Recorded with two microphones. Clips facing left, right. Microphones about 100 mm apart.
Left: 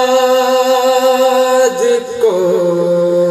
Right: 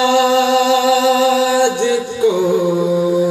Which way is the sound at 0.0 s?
50° left (ahead or behind).